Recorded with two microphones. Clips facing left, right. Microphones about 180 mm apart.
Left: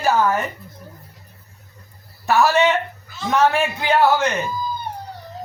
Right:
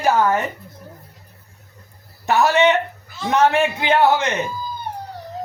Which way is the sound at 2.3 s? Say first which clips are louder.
Right 1 dB; 20° right (ahead or behind).